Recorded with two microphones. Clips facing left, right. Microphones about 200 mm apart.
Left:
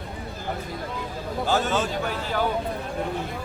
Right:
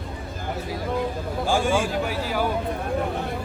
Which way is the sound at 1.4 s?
10° right (ahead or behind).